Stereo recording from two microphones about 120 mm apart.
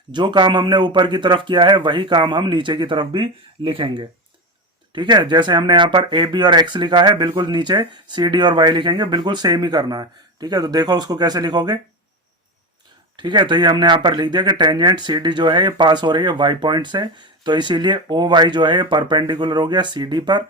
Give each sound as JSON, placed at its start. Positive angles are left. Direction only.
{"t": 0.1, "sound": "speech", "side_deg": -40}
{"t": 13.1, "sound": "speech", "side_deg": -40}